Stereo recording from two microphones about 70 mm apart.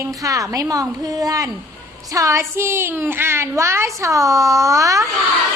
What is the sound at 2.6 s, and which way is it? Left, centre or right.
A woman's voice, right.